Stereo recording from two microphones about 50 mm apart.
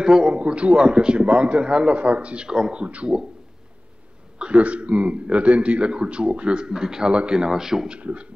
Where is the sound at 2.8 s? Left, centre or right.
Right.